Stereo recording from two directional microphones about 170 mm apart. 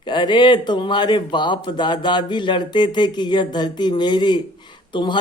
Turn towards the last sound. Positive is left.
turn(degrees=25)  # may be behind; listen again after turning